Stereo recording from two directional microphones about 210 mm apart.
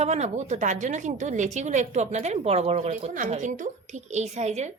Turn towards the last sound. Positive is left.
turn(degrees=-30)  # may be behind; listen again after turning